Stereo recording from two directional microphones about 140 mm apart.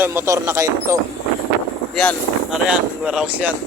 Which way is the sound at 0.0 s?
15° right (ahead or behind).